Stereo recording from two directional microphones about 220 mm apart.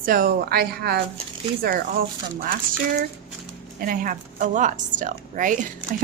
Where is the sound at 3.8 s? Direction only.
40° right (ahead or behind).